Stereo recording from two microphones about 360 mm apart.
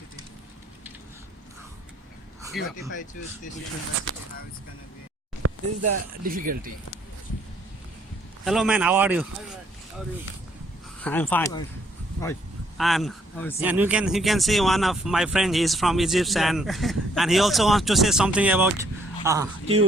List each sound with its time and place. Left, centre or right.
2.5 s speech: centre
5.4 s a sound: right
6.2 s speech: right
8.4 s speech: centre
11.0 s speech: centre